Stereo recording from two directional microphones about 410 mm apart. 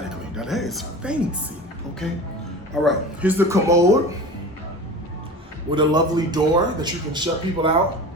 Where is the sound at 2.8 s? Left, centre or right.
Centre.